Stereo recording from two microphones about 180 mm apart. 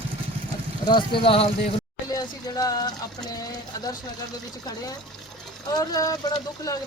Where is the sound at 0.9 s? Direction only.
25° left (ahead or behind).